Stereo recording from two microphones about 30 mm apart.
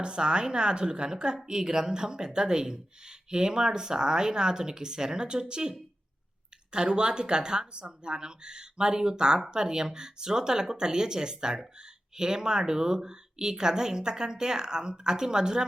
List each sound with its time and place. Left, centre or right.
0.0 s speech: right
6.7 s speech: right